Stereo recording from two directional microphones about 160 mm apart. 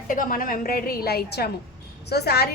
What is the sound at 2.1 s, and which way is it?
Speech, 90° left.